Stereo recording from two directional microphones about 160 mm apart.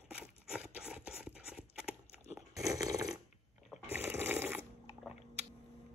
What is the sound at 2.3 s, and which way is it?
Snoring, 20° right (ahead or behind).